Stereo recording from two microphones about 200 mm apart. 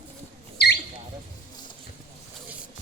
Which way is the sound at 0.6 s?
55° left (ahead or behind).